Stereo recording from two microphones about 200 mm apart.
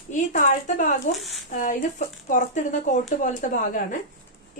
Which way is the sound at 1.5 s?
45° left (ahead or behind).